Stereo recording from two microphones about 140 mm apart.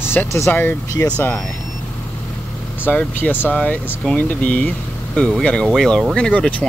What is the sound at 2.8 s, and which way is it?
Speech, 15° left (ahead or behind).